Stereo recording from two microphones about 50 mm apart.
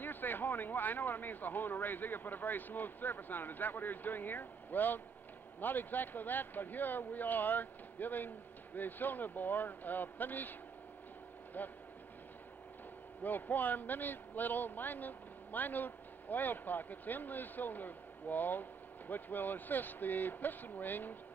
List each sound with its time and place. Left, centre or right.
0.0 s speech: left
11.6 s speech: left
13.2 s speech: left